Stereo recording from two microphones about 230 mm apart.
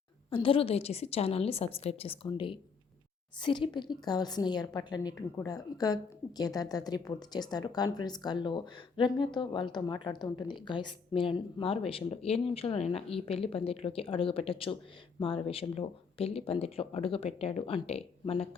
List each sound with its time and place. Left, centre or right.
0.3 s a woman's voice: left